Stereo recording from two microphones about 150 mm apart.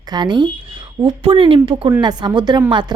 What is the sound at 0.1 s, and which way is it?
A woman's voice, 30° right (ahead or behind).